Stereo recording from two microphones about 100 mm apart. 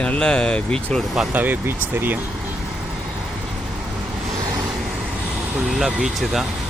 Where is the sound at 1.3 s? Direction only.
20° right (ahead or behind).